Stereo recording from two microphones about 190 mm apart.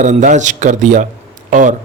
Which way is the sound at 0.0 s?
40° right (ahead or behind).